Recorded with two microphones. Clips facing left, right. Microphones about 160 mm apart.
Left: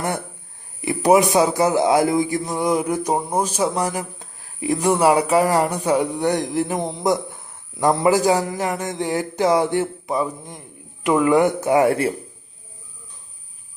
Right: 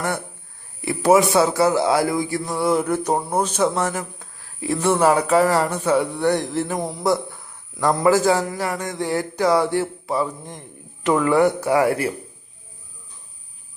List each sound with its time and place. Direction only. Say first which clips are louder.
0.8 s speech: even; 20° left (ahead or behind)